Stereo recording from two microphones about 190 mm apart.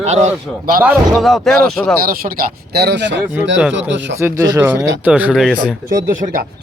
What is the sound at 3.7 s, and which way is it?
Speech, 70° right (ahead or behind).